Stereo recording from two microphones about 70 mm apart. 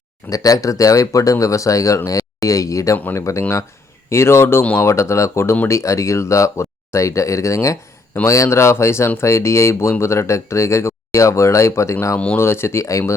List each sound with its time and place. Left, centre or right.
0.3 s a man's voice: left
12.1 s speech: centre
12.4 s speech: left